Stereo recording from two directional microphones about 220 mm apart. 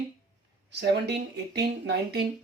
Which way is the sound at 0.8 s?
50° right (ahead or behind).